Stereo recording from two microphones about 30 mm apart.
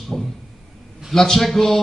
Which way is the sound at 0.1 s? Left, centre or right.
Centre.